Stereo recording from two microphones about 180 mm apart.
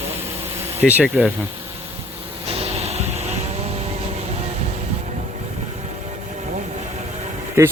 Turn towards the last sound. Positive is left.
turn(degrees=-15)  # may be behind; listen again after turning